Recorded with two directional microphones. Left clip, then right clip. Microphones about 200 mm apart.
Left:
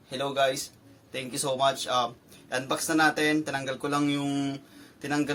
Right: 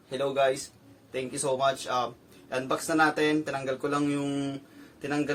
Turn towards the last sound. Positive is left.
turn(degrees=-15)  # may be behind; listen again after turning